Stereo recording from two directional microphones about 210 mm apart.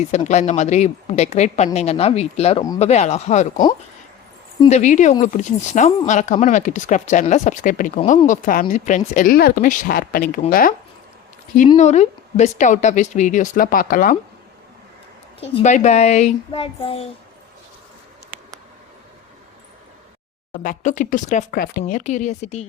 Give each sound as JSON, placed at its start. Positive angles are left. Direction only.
{"t": 0.3, "sound": "speech", "side_deg": 35}
{"t": 4.7, "sound": "speech", "side_deg": 35}
{"t": 11.8, "sound": "speech", "side_deg": 35}
{"t": 15.4, "sound": "speech", "side_deg": 30}
{"t": 20.5, "sound": "speech", "side_deg": 40}